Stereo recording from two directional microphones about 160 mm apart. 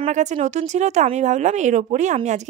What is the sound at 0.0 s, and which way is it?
Speech, 45° right (ahead or behind).